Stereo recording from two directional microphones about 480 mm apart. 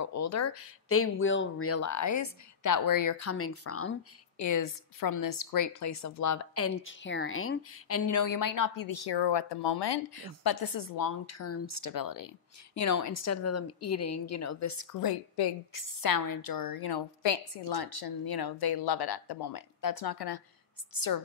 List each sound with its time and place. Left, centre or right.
0.0 s a woman's voice: left
4.4 s a woman's voice: left